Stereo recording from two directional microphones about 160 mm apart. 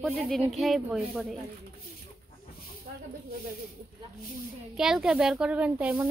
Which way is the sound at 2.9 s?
65° right (ahead or behind).